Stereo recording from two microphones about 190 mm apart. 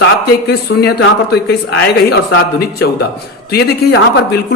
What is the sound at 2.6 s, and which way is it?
Speech, 55° left (ahead or behind).